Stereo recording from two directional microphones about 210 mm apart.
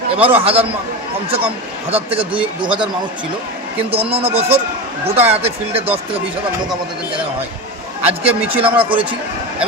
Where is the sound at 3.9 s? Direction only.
25° right (ahead or behind).